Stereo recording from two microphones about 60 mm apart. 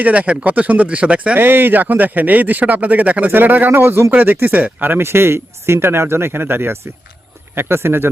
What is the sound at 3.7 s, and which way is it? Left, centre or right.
Speech, right.